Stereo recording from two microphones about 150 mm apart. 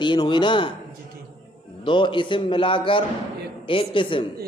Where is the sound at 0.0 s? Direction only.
30° left (ahead or behind).